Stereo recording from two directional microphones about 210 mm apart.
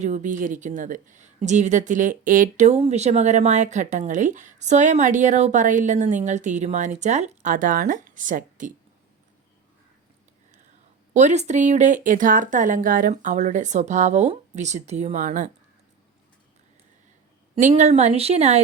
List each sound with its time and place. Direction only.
0.0 s a woman's voice: 35° right (ahead or behind)
11.1 s a woman's voice: 35° right (ahead or behind)
17.5 s a woman's voice: 35° right (ahead or behind)